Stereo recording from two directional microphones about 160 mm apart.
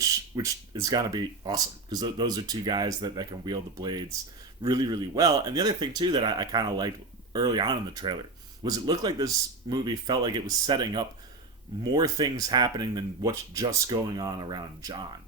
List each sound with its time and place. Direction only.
0.0 s speech: 25° right (ahead or behind)